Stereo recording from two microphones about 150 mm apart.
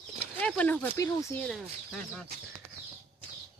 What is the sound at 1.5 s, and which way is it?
Speech, 5° left (ahead or behind).